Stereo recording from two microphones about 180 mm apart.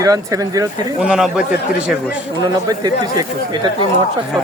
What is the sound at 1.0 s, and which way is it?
Speech, 5° right (ahead or behind).